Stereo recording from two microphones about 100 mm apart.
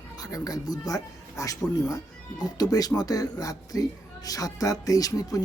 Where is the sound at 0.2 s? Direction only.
35° left (ahead or behind).